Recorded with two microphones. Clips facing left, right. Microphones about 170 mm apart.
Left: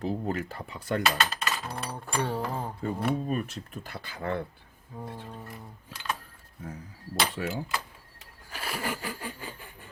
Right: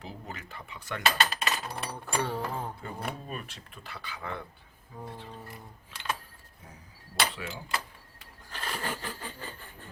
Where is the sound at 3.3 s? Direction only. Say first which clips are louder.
Left 9 dB; 45° left (ahead or behind).